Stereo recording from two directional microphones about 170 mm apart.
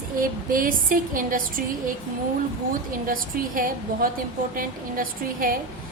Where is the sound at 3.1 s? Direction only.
55° right (ahead or behind).